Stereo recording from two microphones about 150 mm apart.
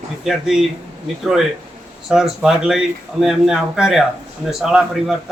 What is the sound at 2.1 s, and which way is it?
Speech, 5° right (ahead or behind).